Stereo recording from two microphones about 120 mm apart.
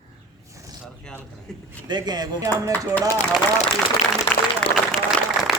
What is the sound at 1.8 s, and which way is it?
Speech, 35° right (ahead or behind).